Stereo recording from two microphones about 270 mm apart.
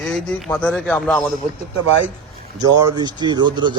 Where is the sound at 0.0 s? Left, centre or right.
Centre.